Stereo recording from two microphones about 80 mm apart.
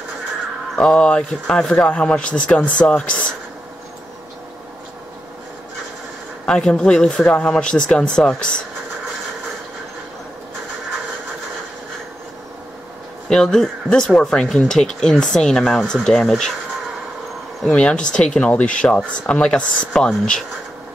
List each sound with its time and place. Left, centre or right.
0.7 s speech: centre
6.4 s speech: centre
13.3 s speech: centre
17.6 s speech: centre